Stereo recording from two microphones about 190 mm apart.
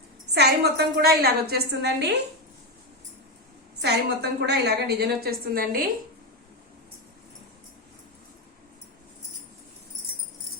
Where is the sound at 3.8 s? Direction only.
60° right (ahead or behind).